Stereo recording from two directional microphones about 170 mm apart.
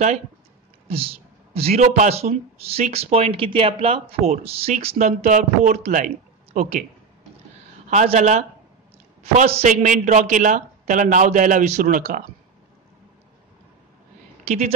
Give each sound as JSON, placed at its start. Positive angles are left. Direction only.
{"t": 0.8, "sound": "speech", "side_deg": -35}
{"t": 7.9, "sound": "a man's voice", "side_deg": -45}
{"t": 14.4, "sound": "a sound", "side_deg": -40}